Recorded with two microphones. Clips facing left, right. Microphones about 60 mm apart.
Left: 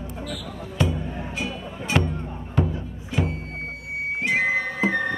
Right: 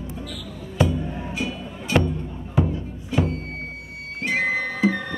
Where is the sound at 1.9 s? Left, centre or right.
Centre.